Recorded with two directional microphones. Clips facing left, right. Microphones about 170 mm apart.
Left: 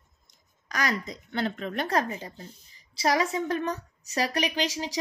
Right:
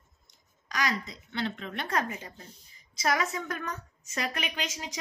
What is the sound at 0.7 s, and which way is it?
A woman's voice, 45° left (ahead or behind).